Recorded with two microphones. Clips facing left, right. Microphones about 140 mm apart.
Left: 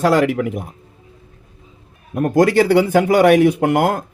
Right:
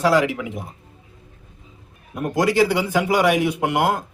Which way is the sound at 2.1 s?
50° left (ahead or behind).